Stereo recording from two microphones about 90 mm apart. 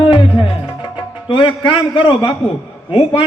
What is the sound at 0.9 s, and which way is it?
A man's voice, 65° left (ahead or behind).